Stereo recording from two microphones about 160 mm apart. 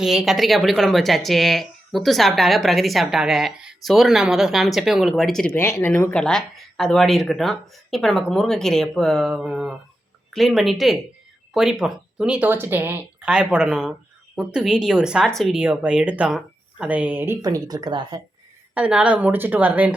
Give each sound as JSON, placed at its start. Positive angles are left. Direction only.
{"t": 0.0, "sound": "speech", "side_deg": 0}
{"t": 5.5, "sound": "speech", "side_deg": 15}
{"t": 17.4, "sound": "speech", "side_deg": -25}
{"t": 18.7, "sound": "speech", "side_deg": -5}